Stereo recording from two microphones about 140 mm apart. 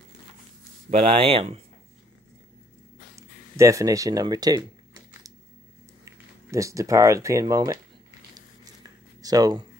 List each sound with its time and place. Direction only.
1.1 s speech: 40° right (ahead or behind)
3.2 s speech: 20° right (ahead or behind)
6.5 s speech: 20° right (ahead or behind)
8.4 s a sound: 25° right (ahead or behind)